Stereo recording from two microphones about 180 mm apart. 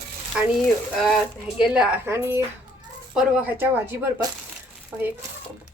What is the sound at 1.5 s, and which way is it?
A woman's voice, 5° right (ahead or behind).